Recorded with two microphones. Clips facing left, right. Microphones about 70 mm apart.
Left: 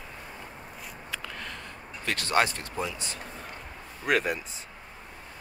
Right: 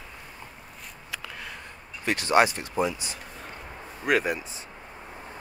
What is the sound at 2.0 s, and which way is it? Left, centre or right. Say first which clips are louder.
Speech: right 4 dB; centre.